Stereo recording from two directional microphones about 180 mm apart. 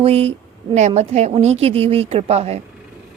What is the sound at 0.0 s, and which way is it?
A woman's voice, 35° right (ahead or behind).